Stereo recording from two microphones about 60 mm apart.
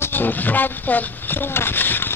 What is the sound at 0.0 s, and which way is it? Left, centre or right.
Speech, left.